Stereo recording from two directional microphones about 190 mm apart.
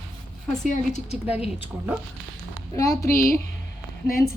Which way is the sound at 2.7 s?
15° left (ahead or behind).